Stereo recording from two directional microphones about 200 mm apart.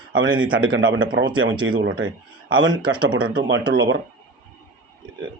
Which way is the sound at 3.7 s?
70° right (ahead or behind).